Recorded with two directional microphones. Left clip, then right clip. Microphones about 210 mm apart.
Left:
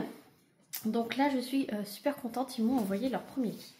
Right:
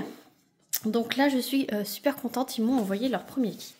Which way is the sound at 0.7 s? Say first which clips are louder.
Right 5 dB; 55° right (ahead or behind).